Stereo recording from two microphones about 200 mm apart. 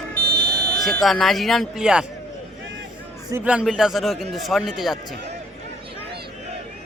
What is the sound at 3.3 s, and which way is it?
Speech, 5° right (ahead or behind).